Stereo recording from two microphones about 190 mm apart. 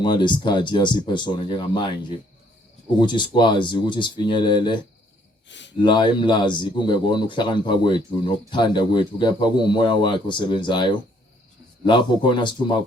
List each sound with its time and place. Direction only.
0.0 s a man's voice: 25° left (ahead or behind)
3.0 s a man's voice: 25° left (ahead or behind)
5.5 s speech: 70° left (ahead or behind)
5.8 s a man's voice: 25° left (ahead or behind)